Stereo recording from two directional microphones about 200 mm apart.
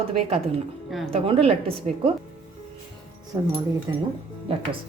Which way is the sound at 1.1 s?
30° right (ahead or behind).